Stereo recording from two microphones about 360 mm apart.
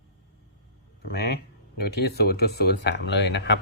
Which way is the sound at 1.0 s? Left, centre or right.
Left.